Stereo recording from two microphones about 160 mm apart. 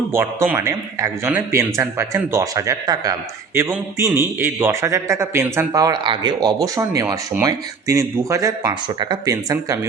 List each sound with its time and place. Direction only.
0.1 s a man's voice: 15° right (ahead or behind)